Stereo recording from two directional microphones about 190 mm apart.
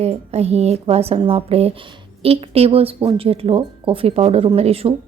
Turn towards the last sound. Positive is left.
turn(degrees=-30)  # may be behind; listen again after turning